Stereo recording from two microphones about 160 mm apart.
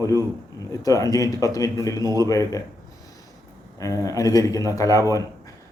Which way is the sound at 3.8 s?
20° left (ahead or behind).